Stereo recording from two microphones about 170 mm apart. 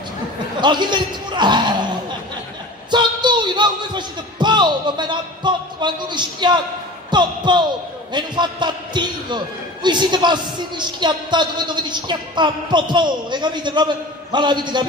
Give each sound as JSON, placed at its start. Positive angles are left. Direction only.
{"t": 0.6, "sound": "a man's voice", "side_deg": -25}
{"t": 2.9, "sound": "a woman's voice", "side_deg": -25}